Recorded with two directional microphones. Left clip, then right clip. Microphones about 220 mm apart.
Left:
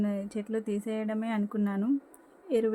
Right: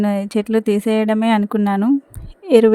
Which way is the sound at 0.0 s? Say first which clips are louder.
Right 14 dB; 45° right (ahead or behind).